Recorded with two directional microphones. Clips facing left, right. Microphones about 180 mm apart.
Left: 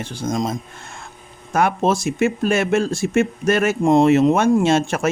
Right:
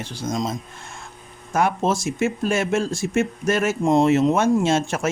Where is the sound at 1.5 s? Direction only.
65° left (ahead or behind).